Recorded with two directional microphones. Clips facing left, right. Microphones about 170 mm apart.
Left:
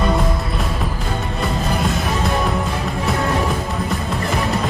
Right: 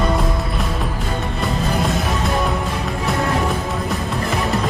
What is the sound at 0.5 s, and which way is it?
Music, centre (ahead or behind).